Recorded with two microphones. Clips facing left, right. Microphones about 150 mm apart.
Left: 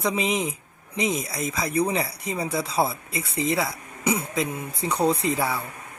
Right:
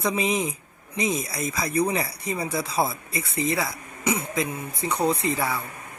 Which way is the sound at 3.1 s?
30° left (ahead or behind).